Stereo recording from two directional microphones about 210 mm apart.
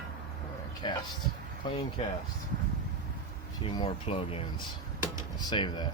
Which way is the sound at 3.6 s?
25° left (ahead or behind).